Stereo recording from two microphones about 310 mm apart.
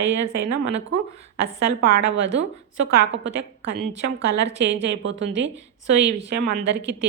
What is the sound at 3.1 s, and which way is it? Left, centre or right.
A woman's voice, right.